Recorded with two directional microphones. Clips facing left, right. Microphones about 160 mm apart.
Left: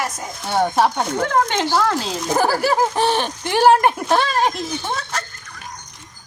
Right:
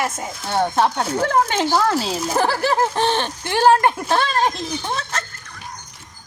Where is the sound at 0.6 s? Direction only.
10° left (ahead or behind).